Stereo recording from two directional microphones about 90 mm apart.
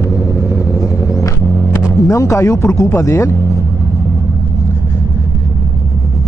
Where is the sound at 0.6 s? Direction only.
35° left (ahead or behind).